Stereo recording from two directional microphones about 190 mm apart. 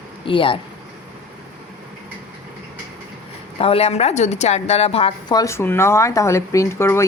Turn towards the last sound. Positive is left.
turn(degrees=15)  # may be behind; listen again after turning